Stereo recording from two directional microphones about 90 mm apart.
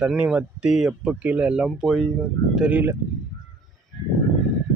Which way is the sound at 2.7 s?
25° right (ahead or behind).